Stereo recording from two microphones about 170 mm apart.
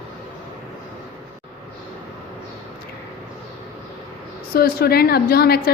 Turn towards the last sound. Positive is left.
turn(degrees=65)  # may be behind; listen again after turning